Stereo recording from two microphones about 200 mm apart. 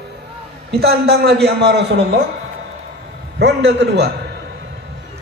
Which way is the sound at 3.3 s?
60° right (ahead or behind).